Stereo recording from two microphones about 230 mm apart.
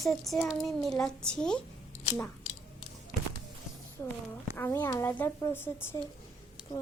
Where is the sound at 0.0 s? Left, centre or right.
Centre.